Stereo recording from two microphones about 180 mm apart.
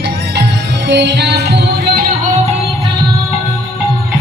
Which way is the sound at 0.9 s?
70° right (ahead or behind).